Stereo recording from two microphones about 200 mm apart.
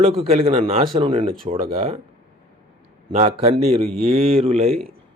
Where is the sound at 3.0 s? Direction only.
35° right (ahead or behind).